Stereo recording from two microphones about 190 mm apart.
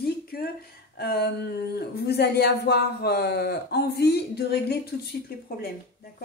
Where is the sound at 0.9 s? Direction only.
55° left (ahead or behind).